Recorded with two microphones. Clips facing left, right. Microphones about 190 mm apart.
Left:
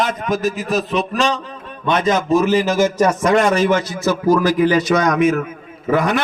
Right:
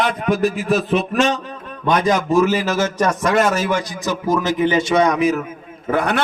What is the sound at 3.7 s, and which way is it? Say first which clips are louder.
Speech: left 4 dB; 15° right (ahead or behind).